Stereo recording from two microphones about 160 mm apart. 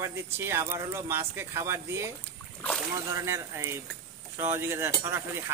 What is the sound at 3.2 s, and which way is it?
Speech, 15° right (ahead or behind).